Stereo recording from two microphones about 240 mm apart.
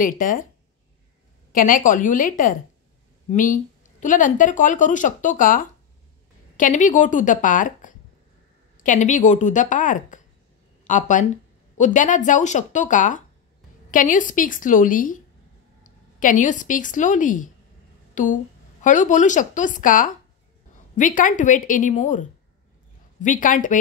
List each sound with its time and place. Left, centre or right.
0.0 s speech: left
1.5 s a woman's voice: left
23.2 s speech: left